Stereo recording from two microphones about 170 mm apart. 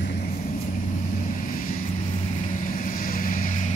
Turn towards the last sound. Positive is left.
turn(degrees=50)  # may be behind; listen again after turning